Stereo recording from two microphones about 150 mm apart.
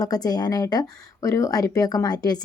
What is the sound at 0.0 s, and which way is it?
Speech, 25° left (ahead or behind).